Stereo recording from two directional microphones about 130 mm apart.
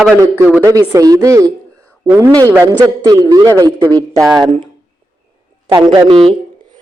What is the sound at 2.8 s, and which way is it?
A woman's voice, 25° right (ahead or behind).